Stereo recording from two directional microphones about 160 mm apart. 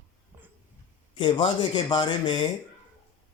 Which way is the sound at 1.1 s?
30° left (ahead or behind).